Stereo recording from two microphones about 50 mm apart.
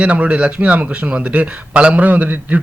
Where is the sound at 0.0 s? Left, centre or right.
Right.